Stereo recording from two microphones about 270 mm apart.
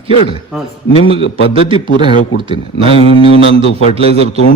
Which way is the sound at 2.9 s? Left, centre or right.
Centre.